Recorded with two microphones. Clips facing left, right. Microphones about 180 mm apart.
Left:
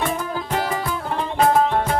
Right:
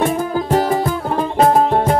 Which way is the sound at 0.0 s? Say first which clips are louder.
Right 7 dB; 45° right (ahead or behind).